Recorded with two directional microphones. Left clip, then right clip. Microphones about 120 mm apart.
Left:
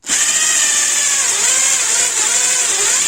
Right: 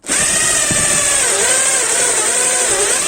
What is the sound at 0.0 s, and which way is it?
Power tool, 20° left (ahead or behind).